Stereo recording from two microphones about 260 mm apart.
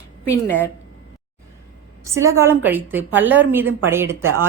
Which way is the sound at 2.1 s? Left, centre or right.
Centre.